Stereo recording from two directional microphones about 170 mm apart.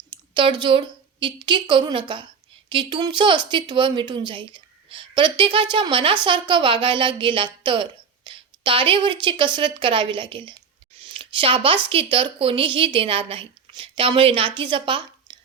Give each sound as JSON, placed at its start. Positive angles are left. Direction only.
{"t": 0.1, "sound": "a woman's voice", "side_deg": -30}